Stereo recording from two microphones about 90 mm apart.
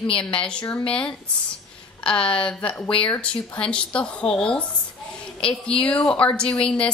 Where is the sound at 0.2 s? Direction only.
10° left (ahead or behind).